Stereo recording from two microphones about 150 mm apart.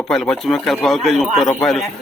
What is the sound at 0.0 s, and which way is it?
Speech, centre (ahead or behind).